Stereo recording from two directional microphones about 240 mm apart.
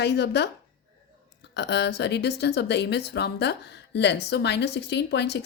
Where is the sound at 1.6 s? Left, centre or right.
Left.